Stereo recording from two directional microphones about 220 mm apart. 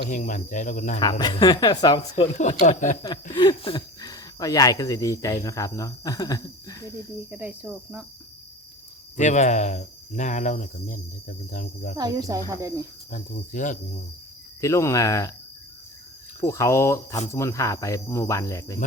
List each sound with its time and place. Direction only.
0.1 s speech: 35° left (ahead or behind)
0.9 s speech: 20° left (ahead or behind)
2.3 s speech: 30° left (ahead or behind)
3.0 s speech: 20° left (ahead or behind)
7.3 s cricket: 5° right (ahead or behind)
9.1 s speech: 30° left (ahead or behind)
11.9 s speech: 20° right (ahead or behind)
13.1 s speech: 40° left (ahead or behind)
14.6 s speech: 15° left (ahead or behind)
16.4 s speech: 15° left (ahead or behind)